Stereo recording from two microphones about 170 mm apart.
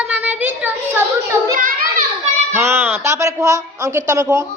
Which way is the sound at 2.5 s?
15° right (ahead or behind).